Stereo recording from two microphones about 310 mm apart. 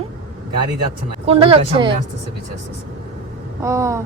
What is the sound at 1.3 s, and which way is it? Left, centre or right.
Speech, centre.